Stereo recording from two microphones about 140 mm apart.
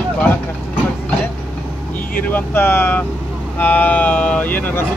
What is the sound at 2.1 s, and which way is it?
Speech, 15° left (ahead or behind).